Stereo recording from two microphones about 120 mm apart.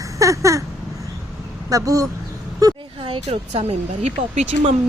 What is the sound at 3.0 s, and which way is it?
Speech, 50° right (ahead or behind).